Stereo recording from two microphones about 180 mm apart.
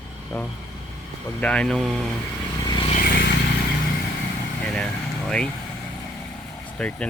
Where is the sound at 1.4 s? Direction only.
5° left (ahead or behind).